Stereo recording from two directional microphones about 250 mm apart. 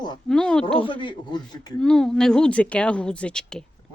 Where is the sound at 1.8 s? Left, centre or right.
Centre.